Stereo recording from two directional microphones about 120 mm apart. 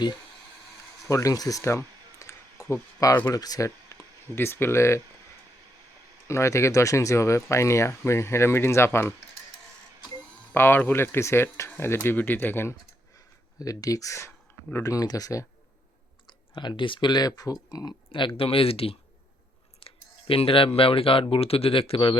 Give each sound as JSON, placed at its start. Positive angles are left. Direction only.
{"t": 1.0, "sound": "speech", "side_deg": 25}
{"t": 2.1, "sound": "a sound", "side_deg": 25}
{"t": 3.3, "sound": "speech", "side_deg": 30}
{"t": 6.2, "sound": "speech", "side_deg": 25}
{"t": 10.5, "sound": "speech", "side_deg": 20}
{"t": 13.6, "sound": "speech", "side_deg": 30}
{"t": 16.6, "sound": "speech", "side_deg": 40}
{"t": 18.3, "sound": "speech", "side_deg": 50}
{"t": 19.8, "sound": "a sound", "side_deg": 50}
{"t": 20.7, "sound": "speech", "side_deg": 50}